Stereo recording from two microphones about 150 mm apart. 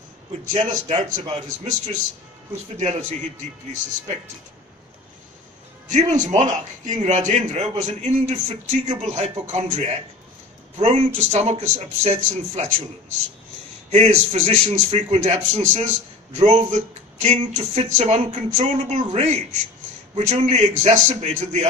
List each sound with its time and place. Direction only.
0.8 s a man's voice: 50° right (ahead or behind)
5.9 s a man's voice: 50° right (ahead or behind)
13.9 s a man's voice: 50° right (ahead or behind)